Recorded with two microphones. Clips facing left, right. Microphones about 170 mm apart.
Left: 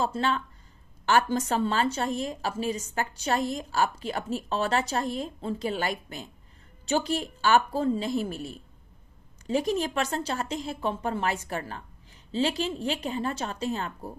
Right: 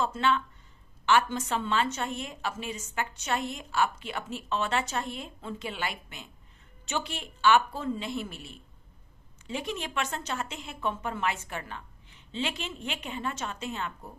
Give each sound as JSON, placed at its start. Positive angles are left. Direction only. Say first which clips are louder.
{"t": 0.0, "sound": "a woman's voice", "louder": "even", "side_deg": 40}